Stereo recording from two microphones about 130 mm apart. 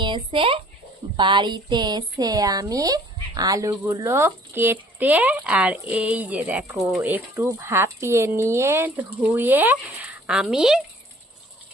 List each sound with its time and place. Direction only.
0.0 s speech: 40° right (ahead or behind); by 10.8 s 5° right (ahead or behind)